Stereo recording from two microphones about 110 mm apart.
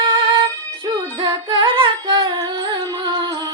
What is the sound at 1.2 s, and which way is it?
Carnatic music, 45° right (ahead or behind).